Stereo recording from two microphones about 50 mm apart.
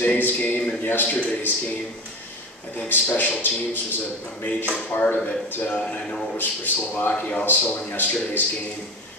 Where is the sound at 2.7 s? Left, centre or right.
Left.